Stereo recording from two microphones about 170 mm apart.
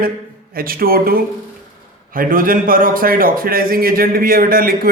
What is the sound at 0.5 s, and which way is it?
A man's voice, 60° right (ahead or behind).